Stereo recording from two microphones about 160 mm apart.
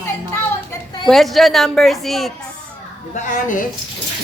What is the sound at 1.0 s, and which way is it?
A woman's voice, centre (ahead or behind).